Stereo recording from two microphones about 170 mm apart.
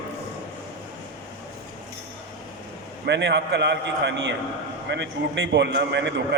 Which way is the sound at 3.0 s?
90° right.